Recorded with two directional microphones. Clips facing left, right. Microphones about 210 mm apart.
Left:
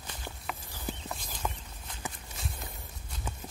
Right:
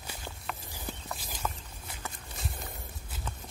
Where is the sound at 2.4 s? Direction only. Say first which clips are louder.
Right 1 dB; centre (ahead or behind).